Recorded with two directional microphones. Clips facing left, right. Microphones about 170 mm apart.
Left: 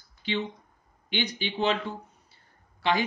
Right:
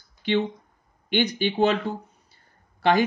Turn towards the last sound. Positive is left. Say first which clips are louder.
# right 6 dB
turn(degrees=-45)  # may be behind; listen again after turning